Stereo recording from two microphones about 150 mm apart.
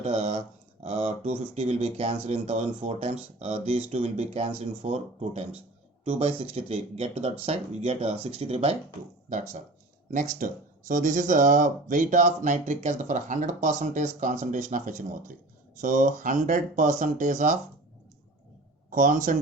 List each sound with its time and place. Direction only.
0.0 s speech: 45° right (ahead or behind)
18.9 s speech: 60° right (ahead or behind)